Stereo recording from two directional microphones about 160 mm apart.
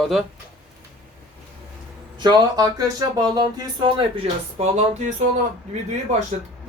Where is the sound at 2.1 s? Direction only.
25° right (ahead or behind); by 5.1 s 45° right (ahead or behind).